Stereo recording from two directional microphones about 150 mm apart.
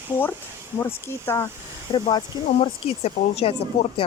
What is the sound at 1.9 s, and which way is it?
Speech, 30° left (ahead or behind).